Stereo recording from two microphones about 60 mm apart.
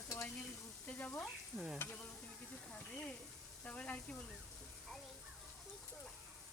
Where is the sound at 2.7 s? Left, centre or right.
Centre.